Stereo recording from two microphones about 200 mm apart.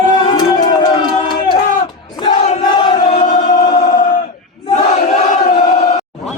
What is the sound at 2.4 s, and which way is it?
Crowd, 30° left (ahead or behind).